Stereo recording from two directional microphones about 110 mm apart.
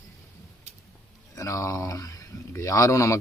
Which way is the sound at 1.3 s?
25° left (ahead or behind).